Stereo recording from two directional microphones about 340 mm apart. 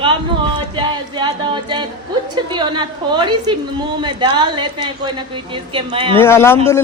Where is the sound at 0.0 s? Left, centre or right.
Centre.